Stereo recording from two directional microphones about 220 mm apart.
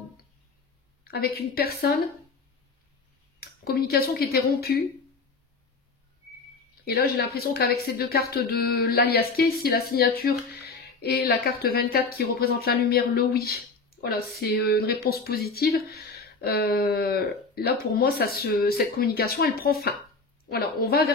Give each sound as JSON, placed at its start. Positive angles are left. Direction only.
{"t": 1.0, "sound": "speech", "side_deg": 45}
{"t": 3.3, "sound": "speech", "side_deg": 45}
{"t": 6.8, "sound": "speech", "side_deg": 45}